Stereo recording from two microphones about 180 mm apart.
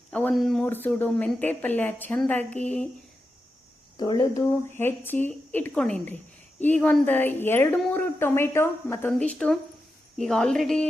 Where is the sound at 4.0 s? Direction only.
25° left (ahead or behind).